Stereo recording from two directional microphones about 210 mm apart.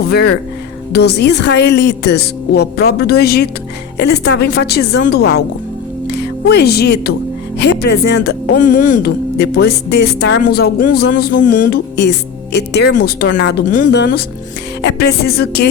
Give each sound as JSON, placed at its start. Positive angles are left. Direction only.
{"t": 0.0, "sound": "speech", "side_deg": 50}
{"t": 13.7, "sound": "speech", "side_deg": 40}
{"t": 13.9, "sound": "speech", "side_deg": 50}